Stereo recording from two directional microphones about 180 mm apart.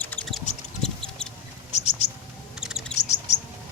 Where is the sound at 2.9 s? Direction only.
40° left (ahead or behind).